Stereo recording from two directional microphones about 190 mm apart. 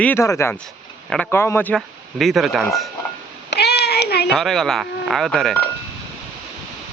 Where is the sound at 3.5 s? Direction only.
60° left (ahead or behind).